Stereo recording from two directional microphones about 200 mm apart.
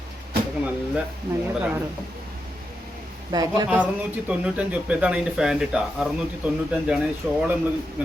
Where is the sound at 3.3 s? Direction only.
20° right (ahead or behind).